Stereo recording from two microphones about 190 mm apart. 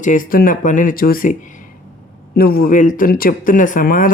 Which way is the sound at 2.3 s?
50° left (ahead or behind).